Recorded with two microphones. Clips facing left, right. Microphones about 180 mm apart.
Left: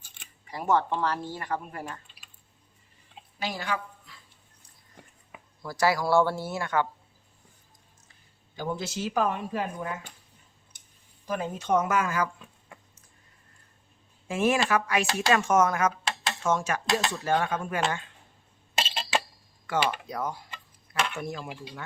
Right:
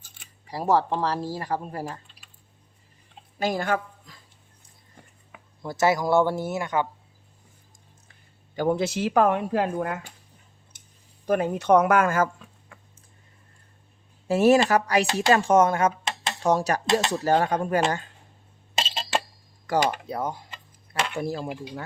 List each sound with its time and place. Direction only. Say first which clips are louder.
0.4 s speech: right 3 dB; 35° right (ahead or behind)
3.3 s speech: right 7 dB; 50° right (ahead or behind)
5.6 s speech: right 3 dB; 20° right (ahead or behind)
8.5 s speech: right 8 dB; 60° right (ahead or behind)
11.3 s speech: right 7 dB; 65° right (ahead or behind)
14.3 s speech: right 7 dB; 40° right (ahead or behind)
19.6 s speech: right 4 dB; 40° right (ahead or behind)